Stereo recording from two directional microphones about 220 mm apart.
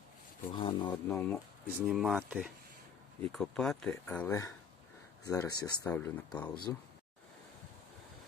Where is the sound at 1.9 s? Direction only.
Centre (ahead or behind).